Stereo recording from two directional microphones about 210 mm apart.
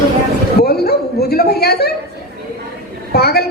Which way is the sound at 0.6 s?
50° left (ahead or behind).